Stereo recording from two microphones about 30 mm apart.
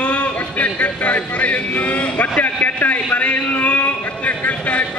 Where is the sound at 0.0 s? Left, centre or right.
Left.